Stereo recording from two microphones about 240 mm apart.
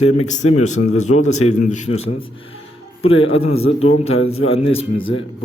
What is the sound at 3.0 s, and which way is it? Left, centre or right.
Speech, left.